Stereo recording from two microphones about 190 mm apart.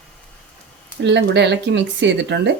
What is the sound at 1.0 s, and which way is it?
Speech, 65° right (ahead or behind).